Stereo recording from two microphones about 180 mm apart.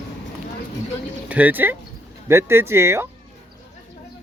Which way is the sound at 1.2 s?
10° right (ahead or behind).